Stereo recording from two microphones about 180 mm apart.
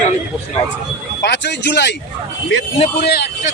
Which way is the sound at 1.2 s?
75° left (ahead or behind).